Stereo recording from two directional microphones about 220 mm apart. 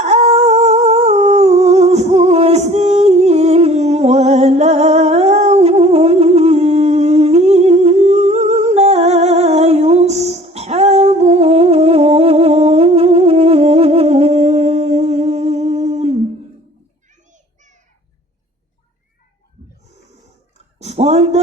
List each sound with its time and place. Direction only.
0.0 s humming: 30° right (ahead or behind)
17.3 s child singing: 35° right (ahead or behind)
20.7 s a sound: 30° right (ahead or behind)